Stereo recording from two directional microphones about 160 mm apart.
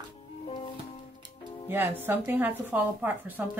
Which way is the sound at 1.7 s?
15° right (ahead or behind).